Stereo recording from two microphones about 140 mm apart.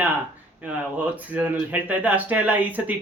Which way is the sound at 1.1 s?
10° right (ahead or behind).